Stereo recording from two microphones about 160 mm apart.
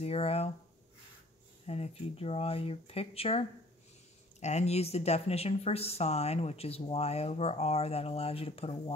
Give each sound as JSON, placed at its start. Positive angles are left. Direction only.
{"t": 0.0, "sound": "speech", "side_deg": 40}
{"t": 1.7, "sound": "speech", "side_deg": 40}